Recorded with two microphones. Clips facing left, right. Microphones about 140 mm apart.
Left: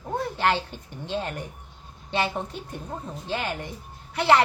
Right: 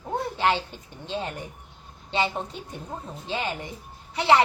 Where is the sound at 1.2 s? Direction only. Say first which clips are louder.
Left 1 dB; 15° right (ahead or behind).